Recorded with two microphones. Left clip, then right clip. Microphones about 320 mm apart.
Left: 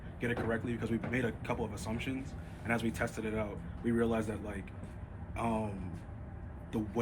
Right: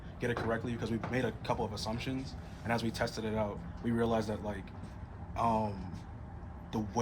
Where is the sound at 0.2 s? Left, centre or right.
Right.